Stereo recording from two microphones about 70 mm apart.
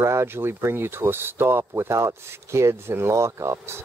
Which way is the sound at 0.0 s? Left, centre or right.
Right.